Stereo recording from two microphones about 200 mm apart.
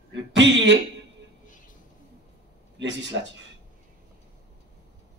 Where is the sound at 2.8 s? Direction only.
65° right (ahead or behind).